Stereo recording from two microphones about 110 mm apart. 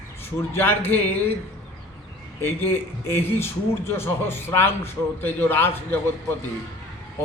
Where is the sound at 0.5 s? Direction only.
20° left (ahead or behind).